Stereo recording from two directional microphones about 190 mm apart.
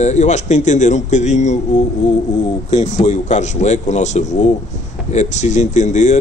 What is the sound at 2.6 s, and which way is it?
Speech, 40° left (ahead or behind).